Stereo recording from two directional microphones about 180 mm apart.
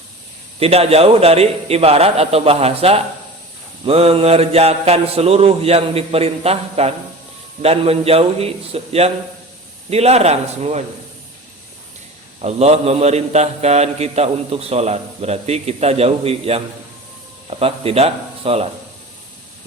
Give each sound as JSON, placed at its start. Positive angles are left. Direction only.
{"t": 0.6, "sound": "a man's voice", "side_deg": -35}
{"t": 12.4, "sound": "a man's voice", "side_deg": -35}